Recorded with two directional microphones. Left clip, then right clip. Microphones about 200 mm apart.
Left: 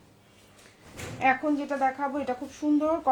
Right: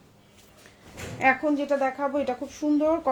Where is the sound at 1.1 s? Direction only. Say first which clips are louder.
Right 2 dB; 40° right (ahead or behind).